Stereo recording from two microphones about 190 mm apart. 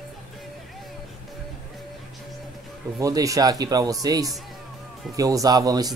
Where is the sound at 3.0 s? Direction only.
15° right (ahead or behind).